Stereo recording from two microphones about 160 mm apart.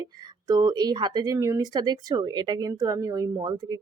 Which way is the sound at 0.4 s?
25° right (ahead or behind).